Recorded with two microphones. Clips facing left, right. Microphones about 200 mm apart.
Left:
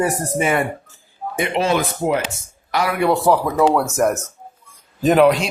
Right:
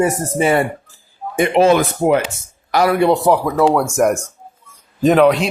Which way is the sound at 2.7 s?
40° right (ahead or behind).